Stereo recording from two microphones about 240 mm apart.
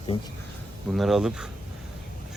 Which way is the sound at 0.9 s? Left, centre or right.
Centre.